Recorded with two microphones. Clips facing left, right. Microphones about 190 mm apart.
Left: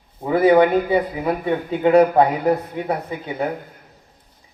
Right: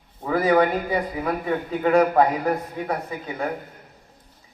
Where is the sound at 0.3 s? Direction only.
25° left (ahead or behind).